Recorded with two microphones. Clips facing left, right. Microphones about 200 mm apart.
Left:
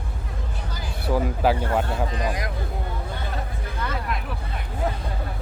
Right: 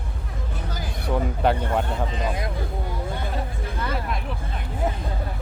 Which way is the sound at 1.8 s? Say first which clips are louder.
Left 1 dB; 25° right (ahead or behind).